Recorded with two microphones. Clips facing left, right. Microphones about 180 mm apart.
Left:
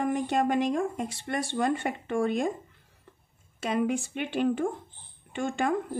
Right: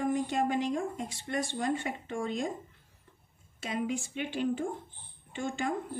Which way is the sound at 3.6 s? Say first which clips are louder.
Left 6 dB; 60° left (ahead or behind).